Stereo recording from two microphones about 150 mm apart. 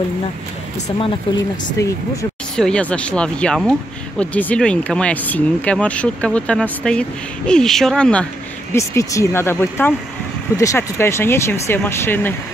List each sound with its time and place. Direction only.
1.8 s speech: 20° left (ahead or behind)
2.5 s speech: 5° left (ahead or behind)
8.7 s speech: 20° left (ahead or behind)